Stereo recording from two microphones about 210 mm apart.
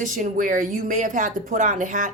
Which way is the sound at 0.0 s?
40° right (ahead or behind).